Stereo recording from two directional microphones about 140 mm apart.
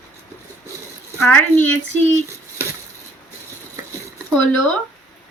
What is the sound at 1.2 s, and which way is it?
Speech, 15° left (ahead or behind).